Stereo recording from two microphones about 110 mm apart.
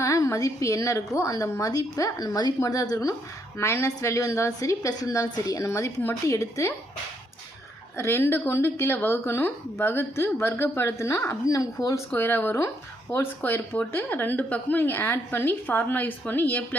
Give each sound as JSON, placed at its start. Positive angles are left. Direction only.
{"t": 0.0, "sound": "speech", "side_deg": 30}
{"t": 7.9, "sound": "speech", "side_deg": 25}
{"t": 12.1, "sound": "speech", "side_deg": 20}